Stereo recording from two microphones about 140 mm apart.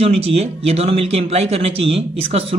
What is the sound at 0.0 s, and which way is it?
Speech, 45° right (ahead or behind).